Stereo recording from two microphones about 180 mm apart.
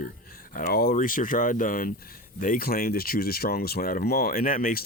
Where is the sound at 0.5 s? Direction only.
55° left (ahead or behind).